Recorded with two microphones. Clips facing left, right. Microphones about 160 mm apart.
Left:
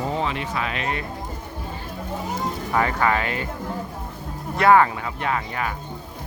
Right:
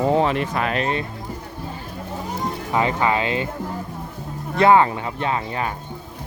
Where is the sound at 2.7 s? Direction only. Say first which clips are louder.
Right 1 dB; 20° right (ahead or behind).